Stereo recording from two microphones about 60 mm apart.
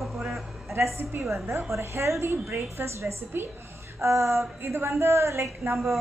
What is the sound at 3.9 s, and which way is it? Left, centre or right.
A woman's voice, right.